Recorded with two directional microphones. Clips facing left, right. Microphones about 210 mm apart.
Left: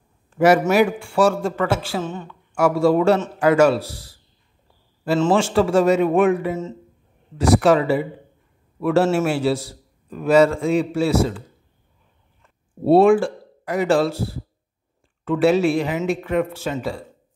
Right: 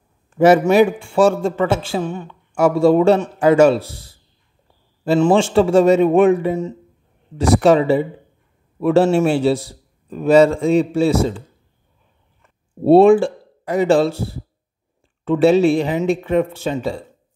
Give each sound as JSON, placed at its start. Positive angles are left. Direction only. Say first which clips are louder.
{"t": 0.4, "sound": "a man's voice", "louder": "right 4 dB", "side_deg": -25}
{"t": 2.5, "sound": "a man's voice", "louder": "right 3 dB", "side_deg": -25}
{"t": 5.3, "sound": "a man's voice", "louder": "right 3 dB", "side_deg": -25}
{"t": 12.8, "sound": "speech", "louder": "right 4 dB", "side_deg": -25}
{"t": 15.2, "sound": "a man's voice", "louder": "right 4 dB", "side_deg": -25}